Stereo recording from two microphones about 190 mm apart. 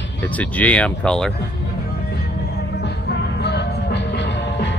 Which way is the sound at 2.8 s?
65° left (ahead or behind).